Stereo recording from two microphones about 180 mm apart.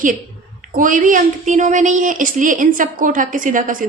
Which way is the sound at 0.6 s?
45° right (ahead or behind).